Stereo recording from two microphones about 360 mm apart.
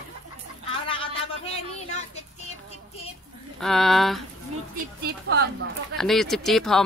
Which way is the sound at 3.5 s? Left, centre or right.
Centre.